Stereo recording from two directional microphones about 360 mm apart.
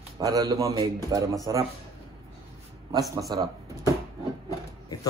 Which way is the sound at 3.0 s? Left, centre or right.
Centre.